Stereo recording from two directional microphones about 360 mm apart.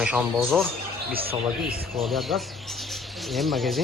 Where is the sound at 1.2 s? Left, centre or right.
Centre.